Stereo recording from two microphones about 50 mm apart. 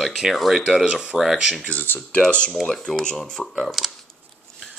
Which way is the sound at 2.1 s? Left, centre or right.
Left.